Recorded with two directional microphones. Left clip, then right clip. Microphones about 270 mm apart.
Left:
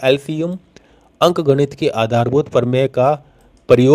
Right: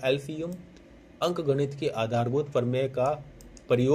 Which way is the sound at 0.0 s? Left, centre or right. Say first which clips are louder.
Left 12 dB; left.